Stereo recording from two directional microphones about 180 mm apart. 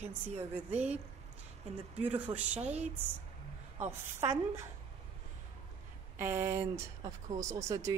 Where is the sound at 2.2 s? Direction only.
10° right (ahead or behind).